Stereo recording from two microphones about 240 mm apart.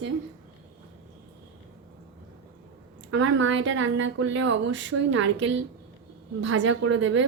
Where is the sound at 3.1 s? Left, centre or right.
Right.